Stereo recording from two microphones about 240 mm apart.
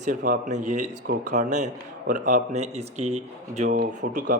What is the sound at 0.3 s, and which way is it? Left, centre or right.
A man's voice, right.